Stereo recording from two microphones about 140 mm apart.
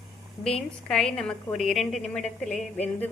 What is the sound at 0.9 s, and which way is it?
A woman's voice, 5° left (ahead or behind).